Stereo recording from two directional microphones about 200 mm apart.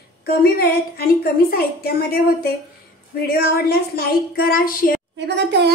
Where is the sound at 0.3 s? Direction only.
50° left (ahead or behind).